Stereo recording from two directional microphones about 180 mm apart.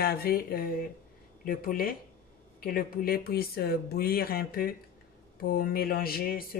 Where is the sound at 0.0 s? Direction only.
60° left (ahead or behind).